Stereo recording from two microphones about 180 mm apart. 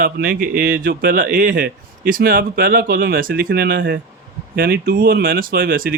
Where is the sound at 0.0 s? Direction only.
55° right (ahead or behind).